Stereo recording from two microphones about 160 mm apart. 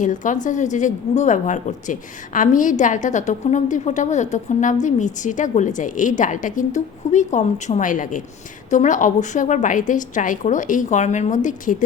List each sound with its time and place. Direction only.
0.0 s a woman's voice: 55° left (ahead or behind)